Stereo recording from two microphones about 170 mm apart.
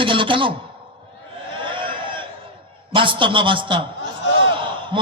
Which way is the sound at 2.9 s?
30° right (ahead or behind).